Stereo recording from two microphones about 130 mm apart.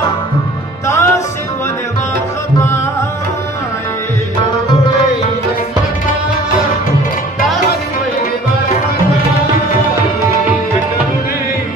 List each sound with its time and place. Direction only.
0.8 s music: 20° left (ahead or behind)